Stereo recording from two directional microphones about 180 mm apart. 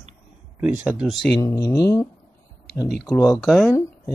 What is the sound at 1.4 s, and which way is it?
Speech, 20° left (ahead or behind).